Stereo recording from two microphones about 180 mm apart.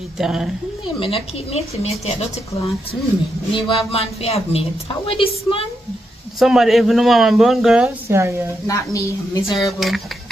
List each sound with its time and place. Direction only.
0.2 s speech: 5° right (ahead or behind)
0.9 s a woman's voice: 30° left (ahead or behind)
3.5 s a woman's voice: 30° left (ahead or behind)
6.4 s speech: centre (ahead or behind)
8.1 s a woman's voice: 15° right (ahead or behind)
8.6 s speech: 15° left (ahead or behind)
9.6 s speech: centre (ahead or behind)